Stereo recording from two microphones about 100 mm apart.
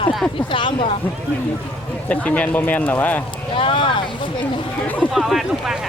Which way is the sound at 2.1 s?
15° left (ahead or behind).